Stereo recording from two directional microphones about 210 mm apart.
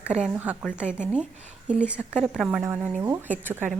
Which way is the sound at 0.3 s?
5° right (ahead or behind).